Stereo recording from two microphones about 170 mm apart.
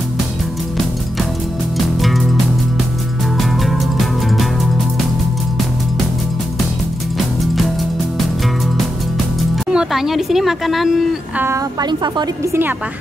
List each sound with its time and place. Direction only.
2.0 s music: centre (ahead or behind)
3.3 s music: centre (ahead or behind)
9.7 s speech: 5° right (ahead or behind)
11.4 s a woman's voice: 20° right (ahead or behind)